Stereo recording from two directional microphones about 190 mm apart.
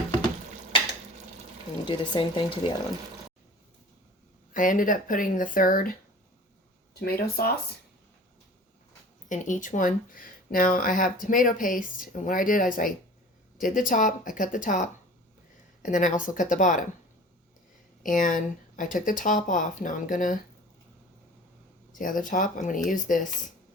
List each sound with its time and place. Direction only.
1.8 s speech: 25° left (ahead or behind)
4.5 s speech: 45° left (ahead or behind)
7.0 s speech: 55° left (ahead or behind)
9.3 s speech: 40° left (ahead or behind)
18.0 s speech: 45° left (ahead or behind)
21.9 s speech: 45° left (ahead or behind)